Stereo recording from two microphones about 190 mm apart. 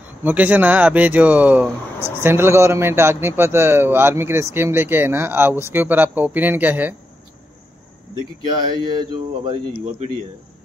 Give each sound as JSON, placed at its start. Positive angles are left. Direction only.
{"t": 0.2, "sound": "speech", "side_deg": -10}
{"t": 8.1, "sound": "speech", "side_deg": -25}